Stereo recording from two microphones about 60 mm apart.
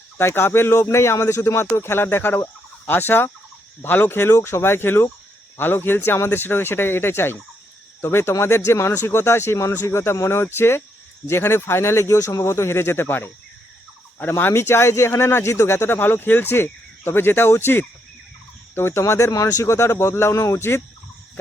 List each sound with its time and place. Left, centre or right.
0.2 s speech: left
4.4 s speech: left
16.0 s speech: left